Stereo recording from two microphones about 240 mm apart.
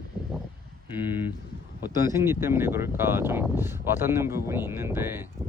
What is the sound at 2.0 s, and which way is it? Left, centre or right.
Speech, centre.